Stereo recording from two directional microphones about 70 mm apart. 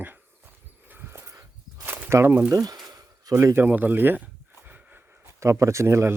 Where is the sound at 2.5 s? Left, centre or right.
Right.